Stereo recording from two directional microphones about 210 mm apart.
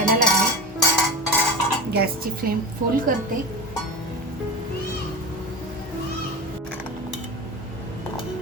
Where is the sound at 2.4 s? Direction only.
45° right (ahead or behind).